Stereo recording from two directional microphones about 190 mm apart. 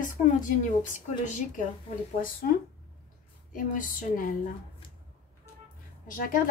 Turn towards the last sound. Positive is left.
turn(degrees=45)  # may be behind; listen again after turning